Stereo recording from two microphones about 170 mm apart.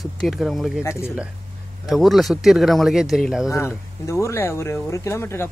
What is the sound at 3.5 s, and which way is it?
Speech, 15° left (ahead or behind).